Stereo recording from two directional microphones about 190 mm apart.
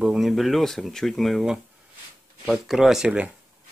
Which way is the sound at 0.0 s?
5° right (ahead or behind).